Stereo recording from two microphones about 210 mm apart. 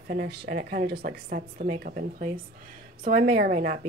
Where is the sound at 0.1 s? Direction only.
50° right (ahead or behind).